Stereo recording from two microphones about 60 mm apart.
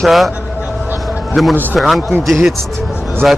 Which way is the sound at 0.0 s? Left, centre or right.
Centre.